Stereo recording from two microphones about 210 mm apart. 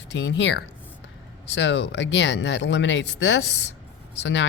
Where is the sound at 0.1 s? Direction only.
55° left (ahead or behind).